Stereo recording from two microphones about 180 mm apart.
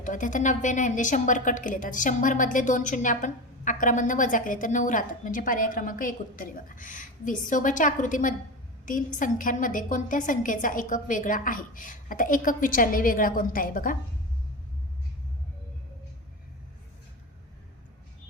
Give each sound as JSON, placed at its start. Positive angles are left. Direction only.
{"t": 0.0, "sound": "a woman's voice", "side_deg": 45}